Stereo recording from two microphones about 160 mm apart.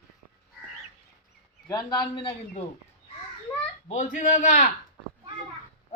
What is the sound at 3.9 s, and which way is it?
Speech, 50° left (ahead or behind).